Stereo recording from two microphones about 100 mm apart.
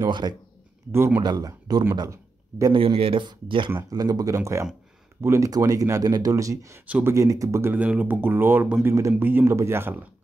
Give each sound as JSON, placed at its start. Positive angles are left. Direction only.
{"t": 0.1, "sound": "speech", "side_deg": -45}
{"t": 0.9, "sound": "speech", "side_deg": -25}
{"t": 1.2, "sound": "speech", "side_deg": -45}
{"t": 2.7, "sound": "speech", "side_deg": -60}
{"t": 3.9, "sound": "speech", "side_deg": -40}
{"t": 6.9, "sound": "speech", "side_deg": -20}
{"t": 7.2, "sound": "speech", "side_deg": -35}
{"t": 7.7, "sound": "speech", "side_deg": -15}
{"t": 8.8, "sound": "speech", "side_deg": -30}